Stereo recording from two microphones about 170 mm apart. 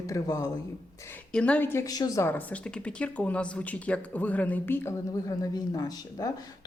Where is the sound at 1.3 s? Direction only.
5° left (ahead or behind); by 6.5 s 20° left (ahead or behind).